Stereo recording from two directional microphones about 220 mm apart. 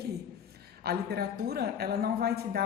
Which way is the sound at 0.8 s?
45° right (ahead or behind).